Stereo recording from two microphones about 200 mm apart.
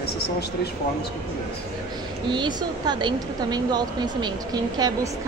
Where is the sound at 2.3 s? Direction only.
20° right (ahead or behind).